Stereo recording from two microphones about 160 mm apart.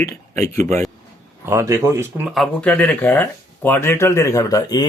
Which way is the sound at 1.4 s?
20° right (ahead or behind).